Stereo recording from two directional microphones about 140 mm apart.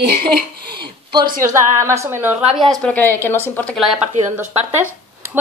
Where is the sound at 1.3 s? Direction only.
70° right (ahead or behind).